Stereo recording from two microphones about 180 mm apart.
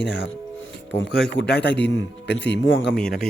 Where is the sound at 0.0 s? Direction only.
75° left (ahead or behind).